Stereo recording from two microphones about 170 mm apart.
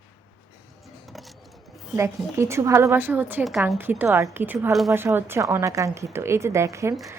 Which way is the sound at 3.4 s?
Centre (ahead or behind).